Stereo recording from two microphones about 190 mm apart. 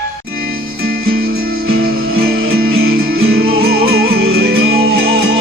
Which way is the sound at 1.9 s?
90° right.